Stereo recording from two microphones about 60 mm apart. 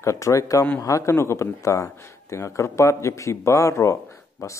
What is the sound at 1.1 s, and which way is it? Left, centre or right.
Speech, left.